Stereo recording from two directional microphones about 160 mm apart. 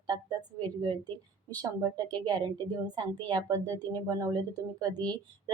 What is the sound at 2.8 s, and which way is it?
A woman's voice, 25° right (ahead or behind).